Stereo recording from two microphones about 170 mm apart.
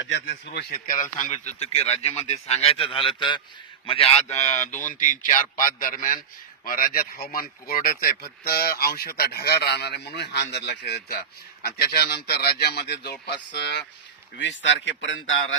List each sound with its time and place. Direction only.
0.0 s a man's voice: 90° left
0.9 s a man's voice: 50° left (ahead or behind); by 13.8 s 80° left
14.3 s a man's voice: 90° left